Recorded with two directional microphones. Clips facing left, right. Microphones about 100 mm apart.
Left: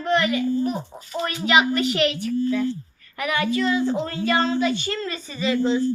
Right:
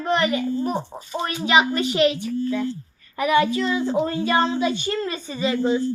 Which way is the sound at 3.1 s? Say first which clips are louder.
Right 4 dB; 20° right (ahead or behind).